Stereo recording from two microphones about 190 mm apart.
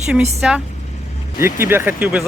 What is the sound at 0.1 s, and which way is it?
A woman's voice, 5° right (ahead or behind).